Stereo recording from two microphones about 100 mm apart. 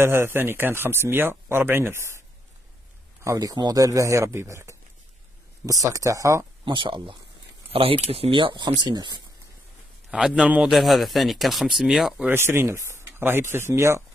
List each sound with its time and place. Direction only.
0.0 s speech: 25° right (ahead or behind)
3.3 s a man's voice: 35° right (ahead or behind)
6.6 s speech: 55° right (ahead or behind)
7.7 s speech: 70° right (ahead or behind); by 9.2 s 45° right (ahead or behind)
10.1 s a man's voice: 10° right (ahead or behind)
10.7 s speech: centre (ahead or behind)
12.3 s speech: 25° right (ahead or behind)